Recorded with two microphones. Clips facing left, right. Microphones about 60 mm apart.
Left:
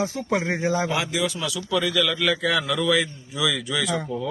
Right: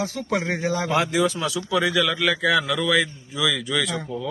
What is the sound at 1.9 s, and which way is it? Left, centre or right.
Speech, centre.